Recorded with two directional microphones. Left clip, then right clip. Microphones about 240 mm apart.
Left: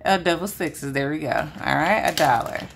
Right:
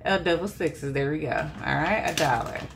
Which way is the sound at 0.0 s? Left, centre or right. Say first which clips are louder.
Left 4 dB; left.